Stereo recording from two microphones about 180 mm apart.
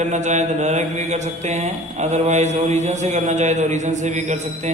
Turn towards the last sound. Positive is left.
turn(degrees=-40)  # may be behind; listen again after turning